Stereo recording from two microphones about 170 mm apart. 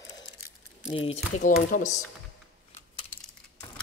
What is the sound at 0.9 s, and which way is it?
Speech, 35° left (ahead or behind).